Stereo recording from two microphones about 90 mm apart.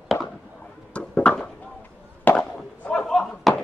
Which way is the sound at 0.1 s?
35° left (ahead or behind).